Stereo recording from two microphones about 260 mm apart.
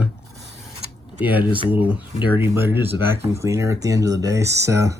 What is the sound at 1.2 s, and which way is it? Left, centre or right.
Speech, centre.